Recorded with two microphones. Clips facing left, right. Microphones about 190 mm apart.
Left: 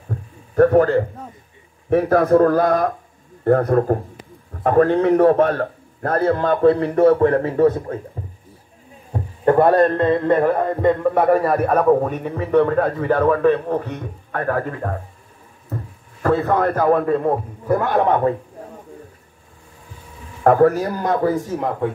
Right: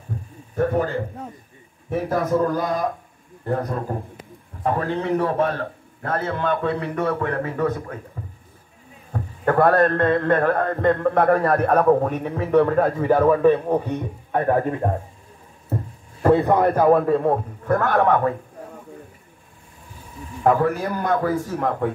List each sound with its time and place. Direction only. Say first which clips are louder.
0.6 s a man's voice: left 8 dB; 60° left (ahead or behind); by 8.0 s 30° left (ahead or behind)
9.1 s a man's voice: left 5 dB; 20° left (ahead or behind); by 17.4 s centre (ahead or behind)
17.6 s a man's voice: left 1 dB; 15° left (ahead or behind)
20.4 s a man's voice: left 3 dB; 50° left (ahead or behind)
20.8 s a man's voice: left 2 dB; 35° left (ahead or behind)